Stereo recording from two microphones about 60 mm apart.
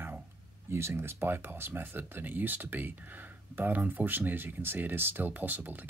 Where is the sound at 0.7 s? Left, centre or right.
Right.